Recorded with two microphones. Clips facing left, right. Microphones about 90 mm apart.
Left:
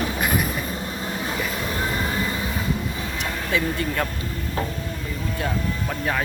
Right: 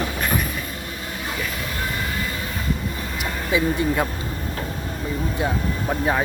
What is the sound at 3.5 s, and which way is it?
Speech, 15° right (ahead or behind).